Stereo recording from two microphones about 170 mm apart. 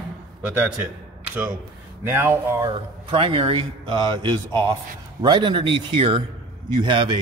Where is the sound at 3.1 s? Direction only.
30° right (ahead or behind).